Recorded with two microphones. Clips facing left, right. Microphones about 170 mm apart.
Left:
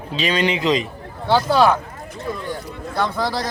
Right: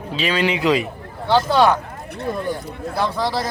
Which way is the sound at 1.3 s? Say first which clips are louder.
Even; 5° left (ahead or behind).